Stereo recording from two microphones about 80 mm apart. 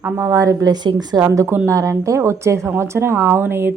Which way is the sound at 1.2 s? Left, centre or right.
Right.